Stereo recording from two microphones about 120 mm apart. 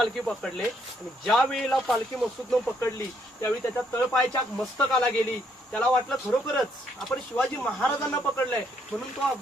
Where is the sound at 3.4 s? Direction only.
25° left (ahead or behind).